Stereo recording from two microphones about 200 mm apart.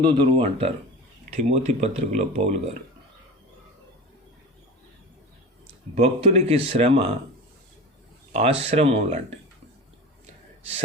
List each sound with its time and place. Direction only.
0.0 s speech: 25° right (ahead or behind)
5.9 s speech: 30° right (ahead or behind)
8.3 s speech: 30° right (ahead or behind)